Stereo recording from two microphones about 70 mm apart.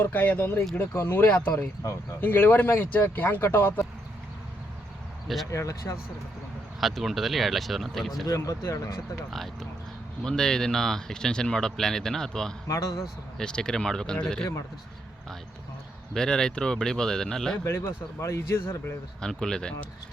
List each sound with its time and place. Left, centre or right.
0.0 s speech: left
5.5 s speech: left
6.7 s speech: centre
8.3 s speech: left
9.3 s speech: centre
12.6 s a man's voice: left
13.4 s speech: centre
16.1 s speech: centre
17.6 s speech: left
19.2 s speech: centre